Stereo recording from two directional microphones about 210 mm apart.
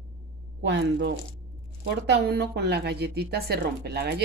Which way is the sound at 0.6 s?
55° right (ahead or behind).